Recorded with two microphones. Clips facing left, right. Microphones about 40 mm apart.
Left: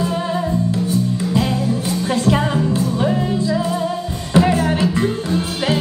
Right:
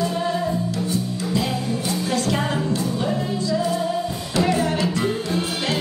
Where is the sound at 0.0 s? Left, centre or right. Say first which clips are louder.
Left 2 dB; centre.